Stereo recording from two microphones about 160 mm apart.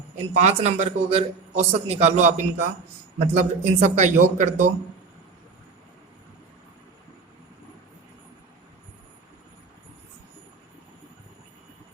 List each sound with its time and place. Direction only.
0.3 s a man's voice: 45° right (ahead or behind)